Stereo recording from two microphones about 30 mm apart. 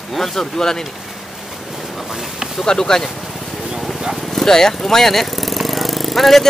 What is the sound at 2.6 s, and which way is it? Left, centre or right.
Speech, left.